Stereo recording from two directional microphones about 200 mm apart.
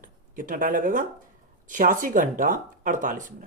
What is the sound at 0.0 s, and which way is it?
Speech, 45° right (ahead or behind).